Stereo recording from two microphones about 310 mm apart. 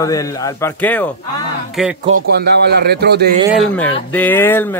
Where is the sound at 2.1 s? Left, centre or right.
Right.